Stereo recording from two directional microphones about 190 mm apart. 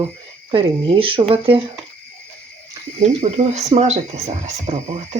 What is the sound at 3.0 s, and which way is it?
Speech, 35° right (ahead or behind).